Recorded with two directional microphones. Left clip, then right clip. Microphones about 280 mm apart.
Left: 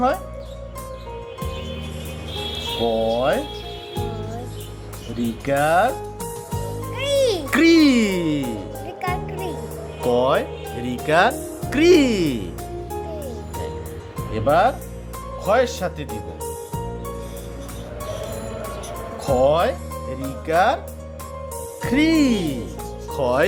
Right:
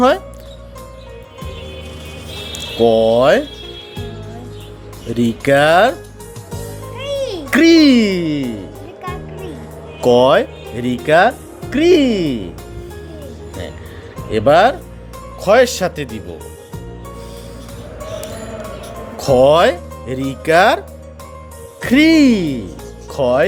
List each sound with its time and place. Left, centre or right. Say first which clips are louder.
2.8 s speech: right 10 dB; right
5.4 s speech: right 7 dB; right
6.9 s music: left 2 dB; left
7.5 s speech: right 7 dB; centre
9.0 s music: left 2 dB; left
10.0 s speech: right 8 dB; right; by 12.5 s centre
14.3 s speech: right 7 dB; right
19.2 s speech: right 8 dB; right; by 23.5 s centre